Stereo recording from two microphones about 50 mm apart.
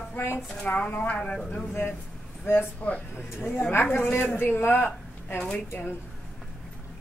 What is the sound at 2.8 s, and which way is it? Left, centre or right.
Speech, left.